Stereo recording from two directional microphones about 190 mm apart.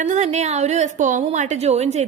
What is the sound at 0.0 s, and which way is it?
A woman's voice, 40° right (ahead or behind).